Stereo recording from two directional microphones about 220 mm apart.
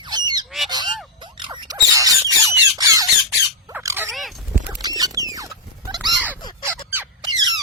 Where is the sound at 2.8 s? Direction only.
15° right (ahead or behind).